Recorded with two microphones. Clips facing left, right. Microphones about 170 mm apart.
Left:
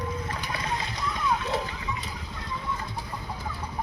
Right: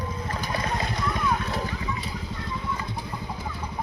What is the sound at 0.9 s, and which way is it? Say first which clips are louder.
Splash: right 4 dB; 55° right (ahead or behind).